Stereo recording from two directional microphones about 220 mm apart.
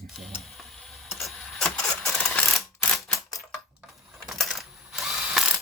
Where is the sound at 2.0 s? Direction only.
5° left (ahead or behind).